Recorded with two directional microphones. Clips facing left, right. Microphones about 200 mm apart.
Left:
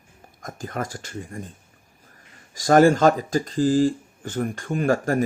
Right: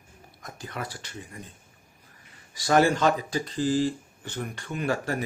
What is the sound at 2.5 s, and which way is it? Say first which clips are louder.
Speech: left 6 dB; 45° left (ahead or behind).